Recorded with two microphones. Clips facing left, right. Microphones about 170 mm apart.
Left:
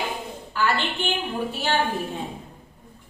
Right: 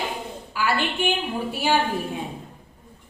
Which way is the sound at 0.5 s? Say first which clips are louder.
Even; 10° right (ahead or behind).